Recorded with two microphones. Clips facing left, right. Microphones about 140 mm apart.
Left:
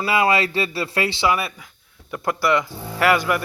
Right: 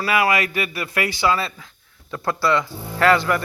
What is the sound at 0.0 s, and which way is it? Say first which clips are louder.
Speech: left 1 dB; 25° left (ahead or behind).